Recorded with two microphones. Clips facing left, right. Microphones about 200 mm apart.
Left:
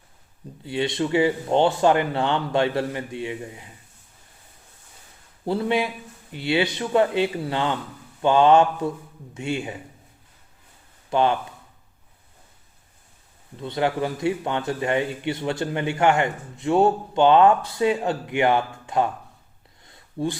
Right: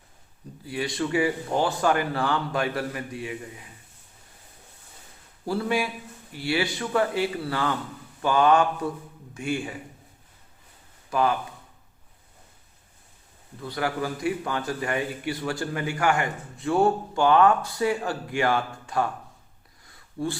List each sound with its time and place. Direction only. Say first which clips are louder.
0.6 s a man's voice: left 4 dB; 25° left (ahead or behind)
5.5 s a man's voice: left 3 dB; 20° left (ahead or behind)
11.1 s speech: left 3 dB; 25° left (ahead or behind)
13.6 s a man's voice: left 4 dB; 25° left (ahead or behind)
19.8 s a sound: left 3 dB; 20° left (ahead or behind)